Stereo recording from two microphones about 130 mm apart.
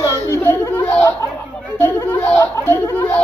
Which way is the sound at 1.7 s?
15° left (ahead or behind).